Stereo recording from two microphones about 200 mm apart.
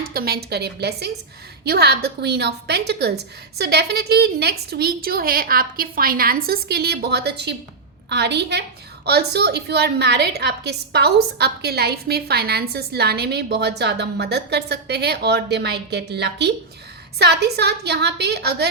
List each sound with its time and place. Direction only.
0.1 s a woman's voice: 50° right (ahead or behind)